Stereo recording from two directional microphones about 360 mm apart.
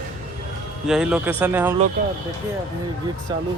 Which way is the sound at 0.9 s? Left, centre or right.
Centre.